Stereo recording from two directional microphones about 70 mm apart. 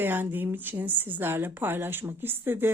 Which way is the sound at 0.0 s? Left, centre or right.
Right.